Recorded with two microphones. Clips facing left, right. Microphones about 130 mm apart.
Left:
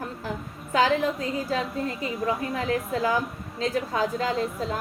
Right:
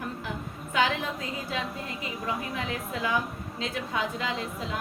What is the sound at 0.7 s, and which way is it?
Speech, 35° left (ahead or behind).